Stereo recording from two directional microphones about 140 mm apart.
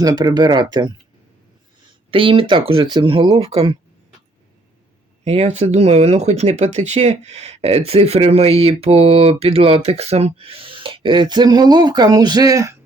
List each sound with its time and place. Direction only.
0.0 s speech: 25° right (ahead or behind)
2.0 s speech: 40° right (ahead or behind)
5.2 s speech: 50° right (ahead or behind); by 12.7 s 25° right (ahead or behind)